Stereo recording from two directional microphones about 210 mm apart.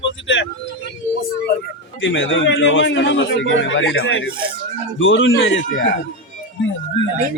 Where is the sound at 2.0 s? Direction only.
60° left (ahead or behind).